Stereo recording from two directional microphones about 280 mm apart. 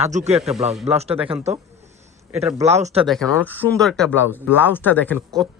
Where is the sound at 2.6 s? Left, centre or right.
Right.